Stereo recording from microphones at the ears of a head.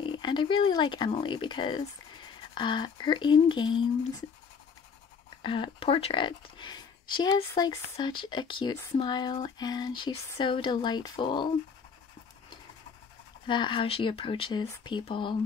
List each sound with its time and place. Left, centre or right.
0.0 s speech: left
5.3 s speech: left
13.5 s speech: left